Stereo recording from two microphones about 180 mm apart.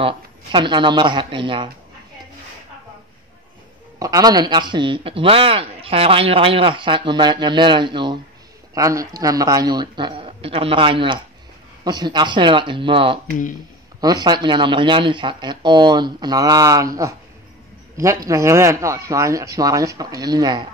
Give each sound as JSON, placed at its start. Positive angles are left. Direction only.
{"t": 0.0, "sound": "a man's voice", "side_deg": -25}
{"t": 4.0, "sound": "a man's voice", "side_deg": -20}